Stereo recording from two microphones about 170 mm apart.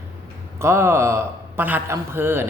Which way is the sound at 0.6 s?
15° right (ahead or behind).